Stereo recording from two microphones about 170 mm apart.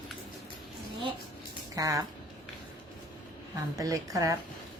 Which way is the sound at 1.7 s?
20° right (ahead or behind).